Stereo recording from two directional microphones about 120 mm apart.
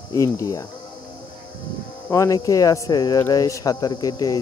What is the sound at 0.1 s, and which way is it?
Speech, 25° left (ahead or behind).